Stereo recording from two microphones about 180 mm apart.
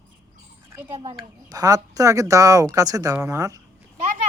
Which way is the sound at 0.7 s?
25° right (ahead or behind).